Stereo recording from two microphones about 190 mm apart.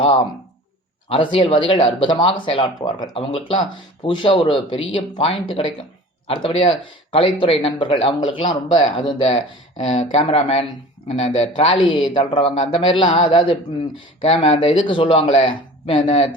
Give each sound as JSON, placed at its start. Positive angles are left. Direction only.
{"t": 1.1, "sound": "speech", "side_deg": 25}
{"t": 8.4, "sound": "speech", "side_deg": 40}